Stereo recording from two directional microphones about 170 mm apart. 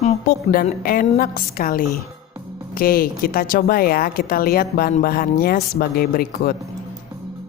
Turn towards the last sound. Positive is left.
turn(degrees=60)  # may be behind; listen again after turning